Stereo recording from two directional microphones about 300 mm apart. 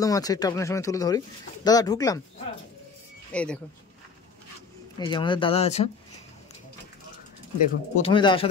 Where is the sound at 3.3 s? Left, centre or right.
Centre.